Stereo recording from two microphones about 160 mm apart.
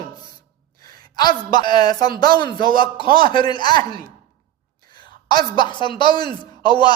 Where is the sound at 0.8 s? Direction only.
25° left (ahead or behind).